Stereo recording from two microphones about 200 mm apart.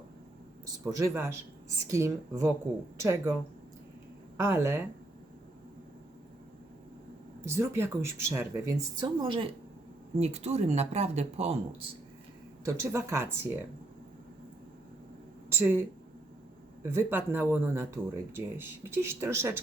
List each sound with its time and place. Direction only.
0.9 s speech: 15° right (ahead or behind)
4.4 s speech: 15° right (ahead or behind)
7.4 s speech: 15° right (ahead or behind); by 11.9 s 30° right (ahead or behind)
12.6 s speech: 15° right (ahead or behind)
15.4 s speech: 10° right (ahead or behind)
16.9 s speech: 10° right (ahead or behind)